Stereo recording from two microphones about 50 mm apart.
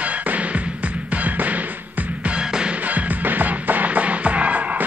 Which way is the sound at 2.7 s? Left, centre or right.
Right.